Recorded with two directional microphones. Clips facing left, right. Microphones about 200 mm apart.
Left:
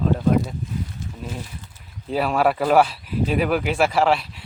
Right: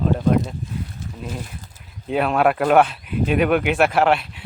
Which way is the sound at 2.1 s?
Centre (ahead or behind).